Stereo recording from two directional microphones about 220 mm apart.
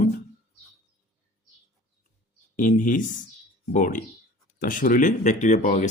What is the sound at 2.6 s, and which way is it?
A man's voice, 35° left (ahead or behind).